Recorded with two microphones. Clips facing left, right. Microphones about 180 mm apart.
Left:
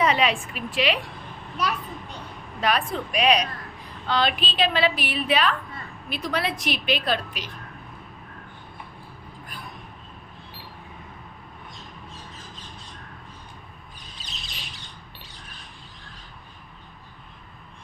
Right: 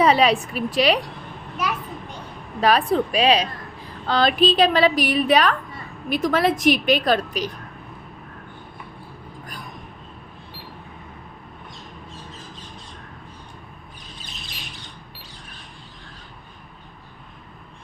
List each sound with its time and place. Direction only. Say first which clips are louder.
0.0 s a woman's voice: right 5 dB; 35° right (ahead or behind)
1.5 s children playing: right 1 dB; 10° right (ahead or behind)
2.6 s a woman's voice: right 7 dB; 35° right (ahead or behind)